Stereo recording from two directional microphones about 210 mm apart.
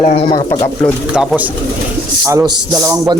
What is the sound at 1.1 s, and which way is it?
Speech, 5° right (ahead or behind).